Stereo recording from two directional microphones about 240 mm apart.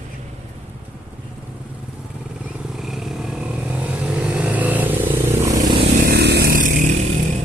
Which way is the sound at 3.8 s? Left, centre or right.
Centre.